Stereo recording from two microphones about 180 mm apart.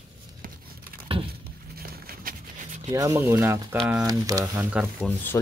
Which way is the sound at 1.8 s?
55° right (ahead or behind).